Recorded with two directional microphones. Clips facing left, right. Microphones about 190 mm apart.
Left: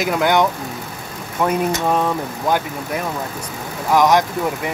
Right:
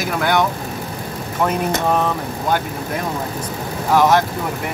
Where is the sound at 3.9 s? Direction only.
15° left (ahead or behind).